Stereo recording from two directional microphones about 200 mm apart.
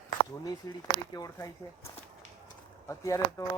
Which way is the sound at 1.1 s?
20° left (ahead or behind).